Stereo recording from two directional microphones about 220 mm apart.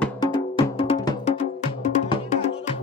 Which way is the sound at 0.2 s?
20° left (ahead or behind).